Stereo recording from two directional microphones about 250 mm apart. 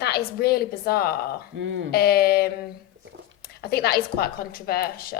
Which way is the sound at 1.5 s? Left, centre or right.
Right.